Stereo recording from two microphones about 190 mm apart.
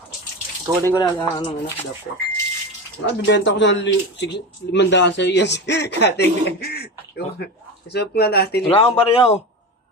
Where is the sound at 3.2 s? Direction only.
70° left (ahead or behind).